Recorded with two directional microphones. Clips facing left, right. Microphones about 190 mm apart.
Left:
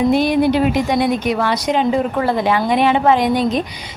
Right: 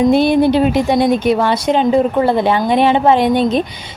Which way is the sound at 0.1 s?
30° right (ahead or behind).